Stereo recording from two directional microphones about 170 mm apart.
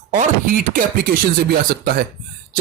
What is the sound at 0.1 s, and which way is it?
Speech, 55° right (ahead or behind).